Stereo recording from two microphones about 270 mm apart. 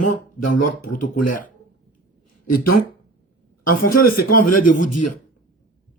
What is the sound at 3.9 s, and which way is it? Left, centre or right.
Speech, left.